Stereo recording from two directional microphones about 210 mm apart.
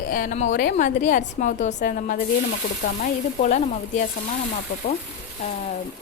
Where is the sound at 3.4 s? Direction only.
35° left (ahead or behind).